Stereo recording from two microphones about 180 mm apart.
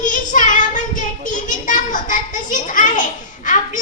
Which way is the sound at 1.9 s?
45° left (ahead or behind).